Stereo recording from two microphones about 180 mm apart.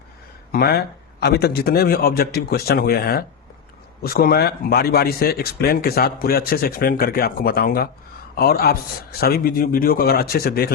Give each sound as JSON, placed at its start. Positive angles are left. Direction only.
{"t": 0.5, "sound": "speech", "side_deg": 60}